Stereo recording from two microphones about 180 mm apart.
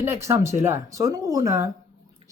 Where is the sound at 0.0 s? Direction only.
15° right (ahead or behind).